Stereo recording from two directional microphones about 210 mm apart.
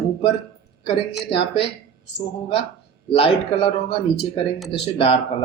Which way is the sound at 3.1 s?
25° left (ahead or behind).